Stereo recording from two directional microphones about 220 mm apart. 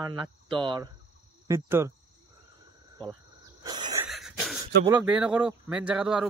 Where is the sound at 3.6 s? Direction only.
20° right (ahead or behind).